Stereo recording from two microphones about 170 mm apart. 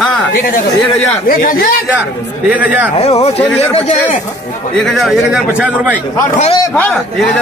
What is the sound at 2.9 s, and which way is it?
Speech, 35° left (ahead or behind).